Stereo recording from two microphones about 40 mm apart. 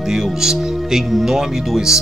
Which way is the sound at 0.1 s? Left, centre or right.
Centre.